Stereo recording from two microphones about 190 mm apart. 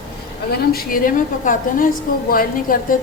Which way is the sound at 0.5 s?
50° left (ahead or behind).